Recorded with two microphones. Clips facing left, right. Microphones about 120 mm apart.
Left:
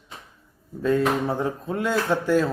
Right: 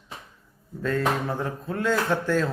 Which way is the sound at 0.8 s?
15° left (ahead or behind).